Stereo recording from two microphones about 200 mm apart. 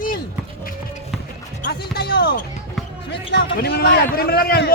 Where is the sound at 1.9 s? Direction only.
55° left (ahead or behind).